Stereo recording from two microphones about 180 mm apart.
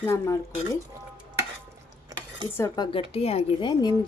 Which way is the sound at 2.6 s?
25° left (ahead or behind).